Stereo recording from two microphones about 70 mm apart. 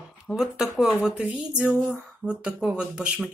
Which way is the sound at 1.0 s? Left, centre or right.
Centre.